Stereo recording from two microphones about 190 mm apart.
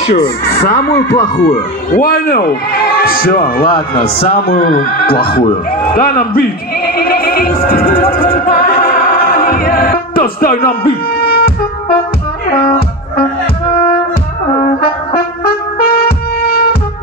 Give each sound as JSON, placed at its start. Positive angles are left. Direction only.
{"t": 0.1, "sound": "speech", "side_deg": 55}
{"t": 4.3, "sound": "neigh", "side_deg": 55}
{"t": 12.5, "sound": "music", "side_deg": 50}
{"t": 14.6, "sound": "music", "side_deg": 55}